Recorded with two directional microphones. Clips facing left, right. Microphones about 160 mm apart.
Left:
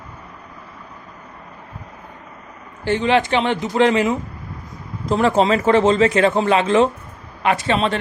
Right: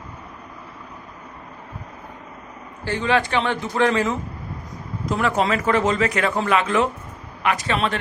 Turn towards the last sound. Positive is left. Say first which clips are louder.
# left 4 dB
turn(degrees=30)  # may be behind; listen again after turning